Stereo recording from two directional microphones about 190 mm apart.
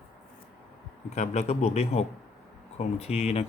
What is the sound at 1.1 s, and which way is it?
Speech, 35° left (ahead or behind).